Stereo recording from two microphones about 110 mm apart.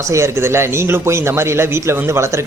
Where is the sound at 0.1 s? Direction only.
25° right (ahead or behind).